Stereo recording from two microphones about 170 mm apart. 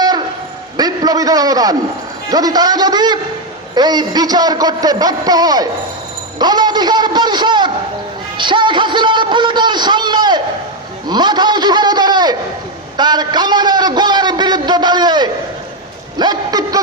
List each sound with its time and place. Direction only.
0.8 s a man's voice: 20° right (ahead or behind)